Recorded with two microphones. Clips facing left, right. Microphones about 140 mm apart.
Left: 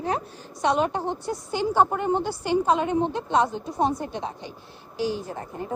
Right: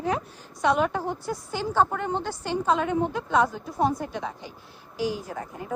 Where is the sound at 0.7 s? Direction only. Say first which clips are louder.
Even; 25° left (ahead or behind).